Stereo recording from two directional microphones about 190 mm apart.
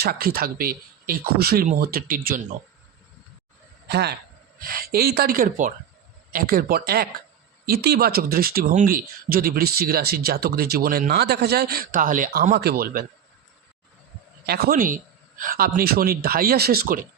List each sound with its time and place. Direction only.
0.0 s speech: 55° right (ahead or behind)
3.8 s a man's voice: 60° right (ahead or behind)
14.4 s speech: 55° right (ahead or behind)